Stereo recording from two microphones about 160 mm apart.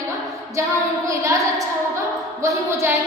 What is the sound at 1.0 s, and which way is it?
Speech, 20° right (ahead or behind).